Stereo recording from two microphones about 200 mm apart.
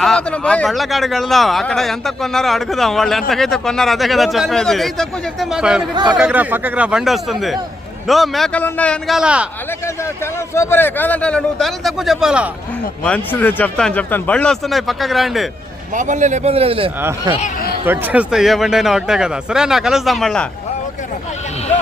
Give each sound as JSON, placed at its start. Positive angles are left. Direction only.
{"t": 0.0, "sound": "speech", "side_deg": 5}
{"t": 10.5, "sound": "speech", "side_deg": 10}
{"t": 13.1, "sound": "speech", "side_deg": 10}
{"t": 16.0, "sound": "speech", "side_deg": -35}
{"t": 17.0, "sound": "speech", "side_deg": -15}
{"t": 17.4, "sound": "speech", "side_deg": 50}
{"t": 17.8, "sound": "speech", "side_deg": -10}